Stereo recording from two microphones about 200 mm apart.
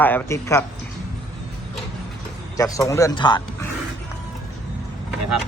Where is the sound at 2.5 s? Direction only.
15° left (ahead or behind).